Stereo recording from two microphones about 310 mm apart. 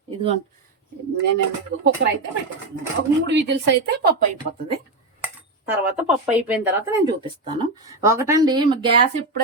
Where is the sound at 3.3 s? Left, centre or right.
Right.